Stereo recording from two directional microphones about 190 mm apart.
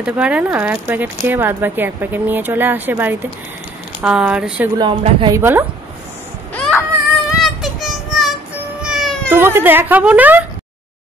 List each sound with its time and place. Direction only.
0.0 s speech: 5° right (ahead or behind)
4.7 s speech: 25° right (ahead or behind)
5.4 s speech: 10° right (ahead or behind)
6.5 s baby cry: 5° left (ahead or behind)
7.2 s a sound: centre (ahead or behind)
8.8 s cat: centre (ahead or behind)
9.3 s speech: 10° right (ahead or behind)